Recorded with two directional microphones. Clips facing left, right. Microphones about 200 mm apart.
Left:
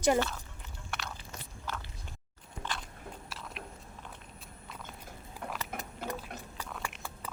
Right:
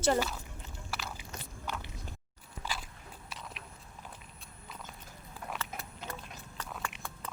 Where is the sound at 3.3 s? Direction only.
Centre (ahead or behind).